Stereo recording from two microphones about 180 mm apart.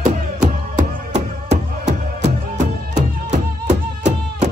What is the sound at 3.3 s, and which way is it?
Music, 40° right (ahead or behind).